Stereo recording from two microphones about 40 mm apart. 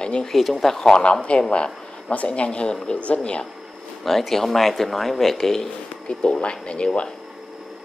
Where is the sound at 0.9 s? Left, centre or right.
Left.